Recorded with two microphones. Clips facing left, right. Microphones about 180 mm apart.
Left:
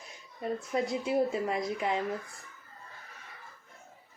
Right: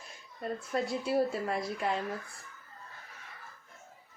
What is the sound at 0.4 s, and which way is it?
Speech, 15° left (ahead or behind).